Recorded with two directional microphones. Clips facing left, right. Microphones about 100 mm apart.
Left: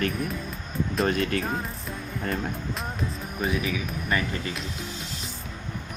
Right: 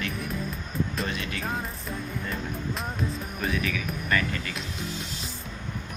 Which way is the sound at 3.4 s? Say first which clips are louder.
Left 2 dB; 20° left (ahead or behind).